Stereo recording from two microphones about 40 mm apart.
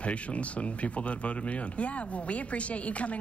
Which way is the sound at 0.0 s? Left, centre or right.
Left.